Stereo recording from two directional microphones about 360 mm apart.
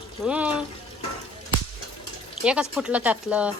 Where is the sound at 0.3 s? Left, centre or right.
Centre.